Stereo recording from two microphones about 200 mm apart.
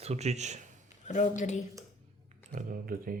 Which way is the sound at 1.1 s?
40° left (ahead or behind).